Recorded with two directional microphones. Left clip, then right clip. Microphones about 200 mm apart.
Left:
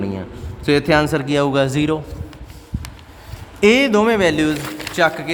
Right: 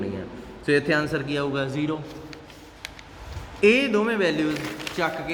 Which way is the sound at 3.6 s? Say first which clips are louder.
Left 6 dB; 55° left (ahead or behind).